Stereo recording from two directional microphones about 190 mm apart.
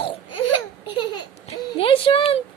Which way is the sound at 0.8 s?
25° left (ahead or behind).